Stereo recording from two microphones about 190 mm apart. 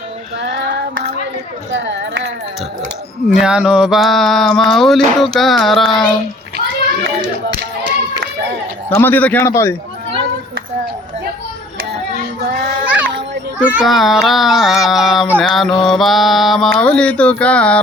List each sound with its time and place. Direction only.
1.7 s speech: 70° right (ahead or behind)
3.2 s speech: 5° right (ahead or behind)
8.9 s a man's voice: 10° left (ahead or behind)
13.6 s speech: 5° right (ahead or behind)